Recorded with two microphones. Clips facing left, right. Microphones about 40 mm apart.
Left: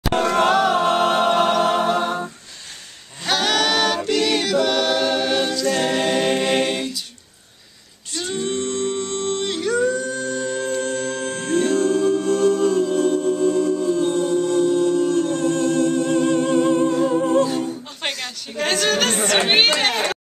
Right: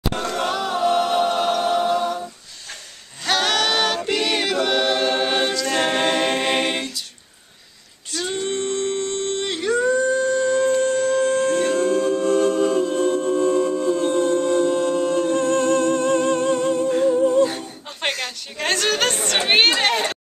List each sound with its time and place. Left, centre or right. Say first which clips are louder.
0.1 s a capella: left 10 dB; left
3.3 s choir: even; centre; by 5.6 s right
5.7 s a capella: left 1 dB; centre
8.2 s music: even; centre
13.9 s music: even; centre
17.4 s a capella: even; right
18.0 s a sound: right 3 dB; centre